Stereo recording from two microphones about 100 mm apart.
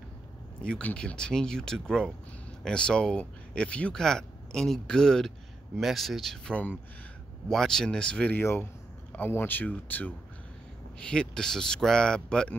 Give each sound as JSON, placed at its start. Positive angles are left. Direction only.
{"t": 0.6, "sound": "speech", "side_deg": 10}